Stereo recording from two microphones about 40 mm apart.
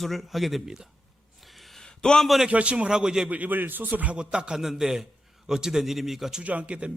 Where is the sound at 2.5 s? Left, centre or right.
Right.